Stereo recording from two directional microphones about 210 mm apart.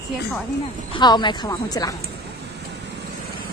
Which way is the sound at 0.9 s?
20° left (ahead or behind).